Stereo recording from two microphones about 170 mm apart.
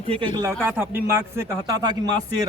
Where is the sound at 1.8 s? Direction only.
25° right (ahead or behind).